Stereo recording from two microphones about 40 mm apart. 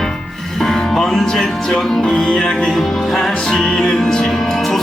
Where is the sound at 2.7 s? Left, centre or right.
Centre.